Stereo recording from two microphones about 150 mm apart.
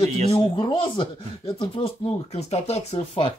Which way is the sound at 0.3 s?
35° left (ahead or behind).